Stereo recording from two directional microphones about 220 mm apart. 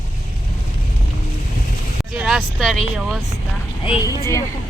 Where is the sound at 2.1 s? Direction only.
5° right (ahead or behind).